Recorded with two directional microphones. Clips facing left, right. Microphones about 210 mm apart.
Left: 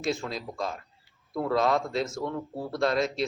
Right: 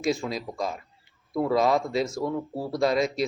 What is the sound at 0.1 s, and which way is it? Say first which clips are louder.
A man's voice: right 3 dB; centre (ahead or behind).